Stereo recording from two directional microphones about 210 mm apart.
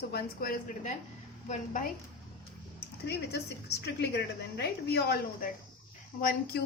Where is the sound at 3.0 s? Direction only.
50° left (ahead or behind).